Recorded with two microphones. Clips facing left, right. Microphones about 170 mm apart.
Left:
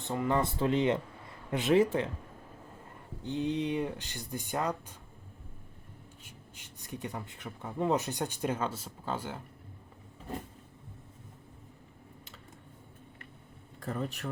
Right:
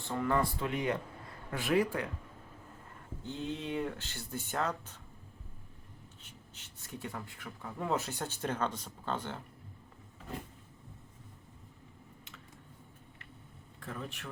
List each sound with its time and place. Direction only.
0.0 s speech: 20° left (ahead or behind)
3.2 s speech: 20° left (ahead or behind)
6.2 s speech: 10° left (ahead or behind)
13.7 s speech: 40° left (ahead or behind)